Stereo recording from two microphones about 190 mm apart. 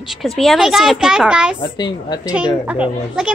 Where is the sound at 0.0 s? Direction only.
Centre (ahead or behind).